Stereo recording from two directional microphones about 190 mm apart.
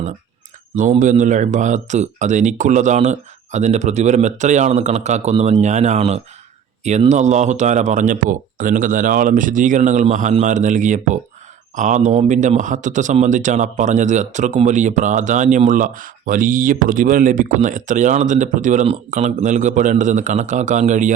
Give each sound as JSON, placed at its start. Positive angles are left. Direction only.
{"t": 0.8, "sound": "speech", "side_deg": -40}